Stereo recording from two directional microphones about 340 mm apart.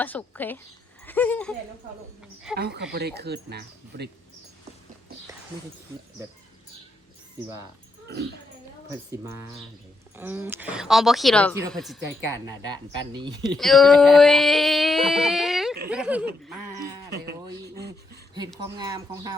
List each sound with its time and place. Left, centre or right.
0.0 s a sound: centre
1.0 s speech: centre
2.6 s speech: right
8.0 s speech: right
9.1 s speech: centre
10.2 s a sound: centre
13.6 s a sound: centre
17.1 s a man's voice: right
18.8 s speech: centre